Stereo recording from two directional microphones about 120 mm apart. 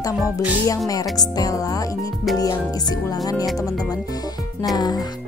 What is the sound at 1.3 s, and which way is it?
Speech, 30° left (ahead or behind).